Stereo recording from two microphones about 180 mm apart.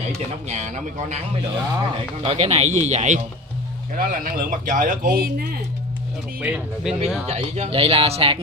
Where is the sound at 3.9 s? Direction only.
50° right (ahead or behind).